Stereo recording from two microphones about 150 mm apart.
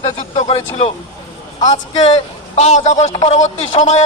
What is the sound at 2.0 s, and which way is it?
A man's voice, 45° left (ahead or behind).